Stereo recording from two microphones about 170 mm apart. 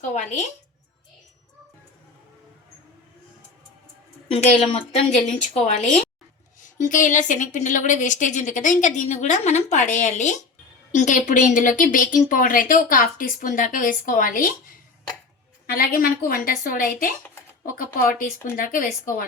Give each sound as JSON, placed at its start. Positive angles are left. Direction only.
{"t": 0.1, "sound": "a woman's voice", "side_deg": 45}
{"t": 4.3, "sound": "a woman's voice", "side_deg": 35}
{"t": 15.6, "sound": "a woman's voice", "side_deg": 60}